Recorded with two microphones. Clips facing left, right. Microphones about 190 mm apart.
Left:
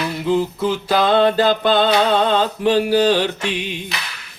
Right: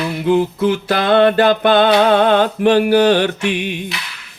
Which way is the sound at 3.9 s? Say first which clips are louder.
Even; 40° left (ahead or behind).